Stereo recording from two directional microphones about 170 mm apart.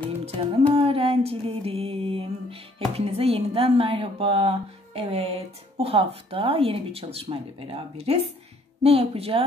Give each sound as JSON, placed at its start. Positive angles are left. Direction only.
{"t": 0.2, "sound": "music", "side_deg": -35}
{"t": 8.8, "sound": "a woman's voice", "side_deg": -35}